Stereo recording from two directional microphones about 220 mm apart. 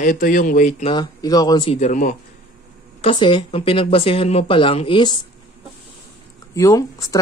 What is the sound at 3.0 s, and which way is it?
Speech, 20° left (ahead or behind).